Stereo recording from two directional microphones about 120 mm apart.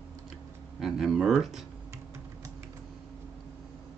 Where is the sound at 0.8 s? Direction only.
Centre (ahead or behind).